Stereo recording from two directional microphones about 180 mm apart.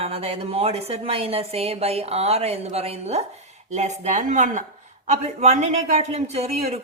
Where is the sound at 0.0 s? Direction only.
35° right (ahead or behind).